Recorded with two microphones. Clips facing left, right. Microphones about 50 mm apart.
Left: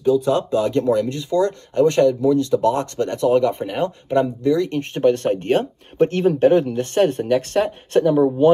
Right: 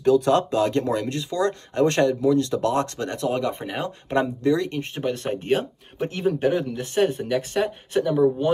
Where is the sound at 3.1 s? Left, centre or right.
Right.